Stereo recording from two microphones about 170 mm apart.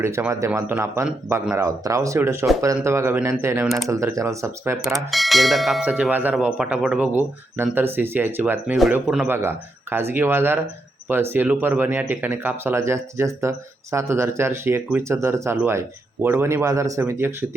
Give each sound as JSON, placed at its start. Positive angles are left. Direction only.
{"t": 0.0, "sound": "speech", "side_deg": -15}
{"t": 5.1, "sound": "speech", "side_deg": 0}